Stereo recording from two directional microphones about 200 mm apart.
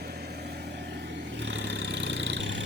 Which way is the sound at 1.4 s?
65° right (ahead or behind).